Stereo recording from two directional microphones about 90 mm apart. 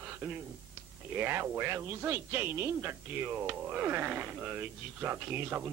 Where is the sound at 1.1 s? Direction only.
25° right (ahead or behind).